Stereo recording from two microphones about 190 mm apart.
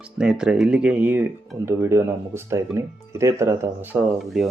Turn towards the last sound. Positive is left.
turn(degrees=0)  # may be behind; listen again after turning